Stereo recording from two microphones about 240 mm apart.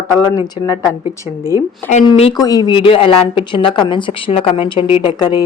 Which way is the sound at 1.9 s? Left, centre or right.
Left.